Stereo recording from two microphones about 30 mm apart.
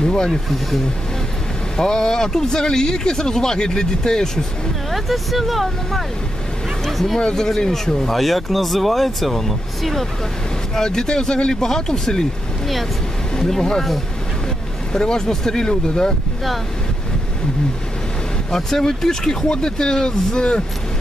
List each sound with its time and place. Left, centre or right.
0.0 s a sound: left
1.8 s speech: left
4.9 s speech: centre
7.2 s speech: left
7.4 s speech: centre
10.7 s speech: centre
13.4 s speech: centre
14.9 s speech: left
18.5 s speech: centre